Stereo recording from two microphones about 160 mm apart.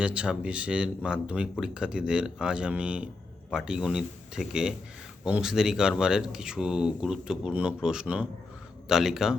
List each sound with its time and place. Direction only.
0.0 s speech: 5° right (ahead or behind)